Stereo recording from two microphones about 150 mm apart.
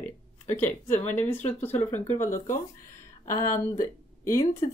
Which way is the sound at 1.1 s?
15° left (ahead or behind).